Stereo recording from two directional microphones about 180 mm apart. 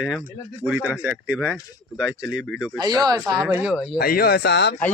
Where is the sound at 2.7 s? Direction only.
25° right (ahead or behind).